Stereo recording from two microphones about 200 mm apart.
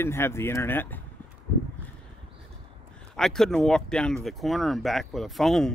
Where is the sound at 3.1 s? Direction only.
Centre (ahead or behind).